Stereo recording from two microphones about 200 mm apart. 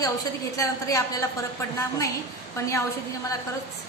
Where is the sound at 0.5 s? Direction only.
15° left (ahead or behind).